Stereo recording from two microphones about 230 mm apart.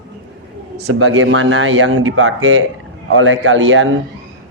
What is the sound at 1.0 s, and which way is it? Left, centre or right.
Speech, right.